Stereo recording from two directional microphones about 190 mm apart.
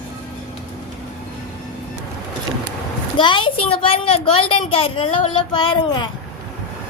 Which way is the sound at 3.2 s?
25° left (ahead or behind).